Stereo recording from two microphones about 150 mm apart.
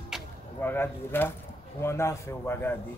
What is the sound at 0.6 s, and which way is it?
A man's voice, 15° left (ahead or behind).